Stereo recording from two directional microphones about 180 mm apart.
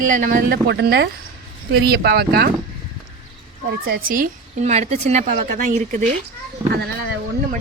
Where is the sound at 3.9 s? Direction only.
50° right (ahead or behind).